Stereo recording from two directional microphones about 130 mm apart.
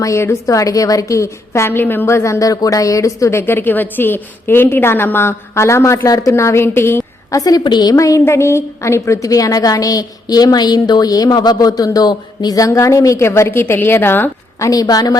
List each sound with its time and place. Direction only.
0.0 s a woman's voice: 20° left (ahead or behind)